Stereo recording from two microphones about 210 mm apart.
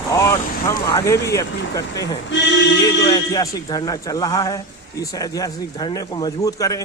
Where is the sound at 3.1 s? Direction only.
20° left (ahead or behind).